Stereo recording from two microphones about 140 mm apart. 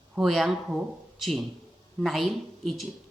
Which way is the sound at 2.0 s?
Centre (ahead or behind).